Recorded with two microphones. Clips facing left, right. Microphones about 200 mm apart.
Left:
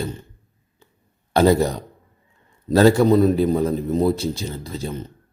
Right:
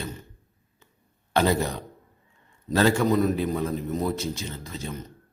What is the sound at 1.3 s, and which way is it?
A man's voice, 35° left (ahead or behind).